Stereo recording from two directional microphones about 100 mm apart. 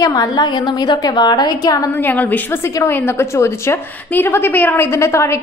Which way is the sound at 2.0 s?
15° left (ahead or behind).